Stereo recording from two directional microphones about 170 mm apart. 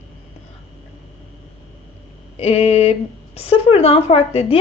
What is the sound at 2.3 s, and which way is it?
A woman's voice, 35° left (ahead or behind).